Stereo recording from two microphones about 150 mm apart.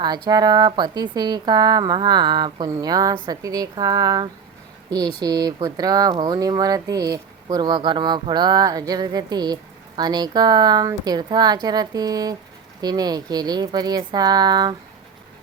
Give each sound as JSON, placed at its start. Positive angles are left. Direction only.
{"t": 0.0, "sound": "a woman's voice", "side_deg": -25}